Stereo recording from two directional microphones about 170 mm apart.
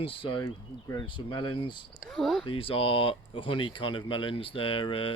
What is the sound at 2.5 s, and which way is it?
Speech, 30° left (ahead or behind).